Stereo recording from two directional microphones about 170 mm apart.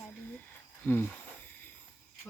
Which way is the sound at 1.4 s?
10° left (ahead or behind).